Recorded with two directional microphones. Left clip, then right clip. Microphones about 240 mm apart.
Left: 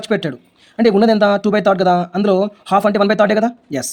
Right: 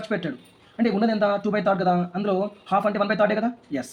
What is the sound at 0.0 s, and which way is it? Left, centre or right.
Speech, left.